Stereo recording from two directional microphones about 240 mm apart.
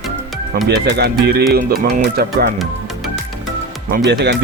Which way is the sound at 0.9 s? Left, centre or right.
Right.